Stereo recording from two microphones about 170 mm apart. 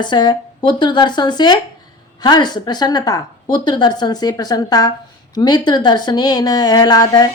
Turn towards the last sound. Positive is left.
turn(degrees=25)  # may be behind; listen again after turning